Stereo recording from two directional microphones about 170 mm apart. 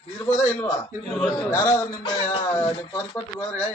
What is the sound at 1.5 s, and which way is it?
Speech, 20° left (ahead or behind).